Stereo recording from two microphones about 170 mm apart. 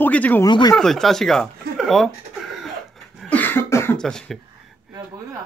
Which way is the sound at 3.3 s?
10° left (ahead or behind).